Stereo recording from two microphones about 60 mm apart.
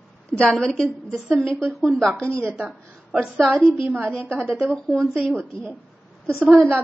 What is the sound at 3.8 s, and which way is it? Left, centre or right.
Speech, right.